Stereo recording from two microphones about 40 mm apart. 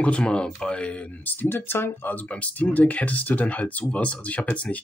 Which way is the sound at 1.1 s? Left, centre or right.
Left.